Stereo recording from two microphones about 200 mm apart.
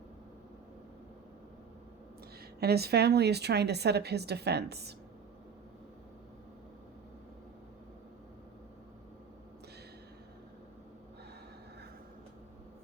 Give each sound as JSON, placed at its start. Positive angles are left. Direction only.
{"t": 2.6, "sound": "a woman's voice", "side_deg": -55}